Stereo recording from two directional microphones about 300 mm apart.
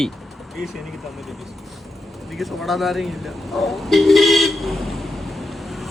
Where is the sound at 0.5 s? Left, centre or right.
Centre.